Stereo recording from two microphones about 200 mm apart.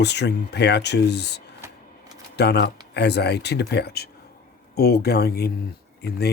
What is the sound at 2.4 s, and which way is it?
Speech, 55° left (ahead or behind).